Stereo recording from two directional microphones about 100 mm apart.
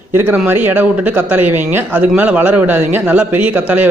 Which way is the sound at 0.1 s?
25° right (ahead or behind).